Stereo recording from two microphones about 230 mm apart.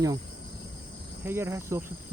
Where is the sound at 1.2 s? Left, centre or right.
Centre.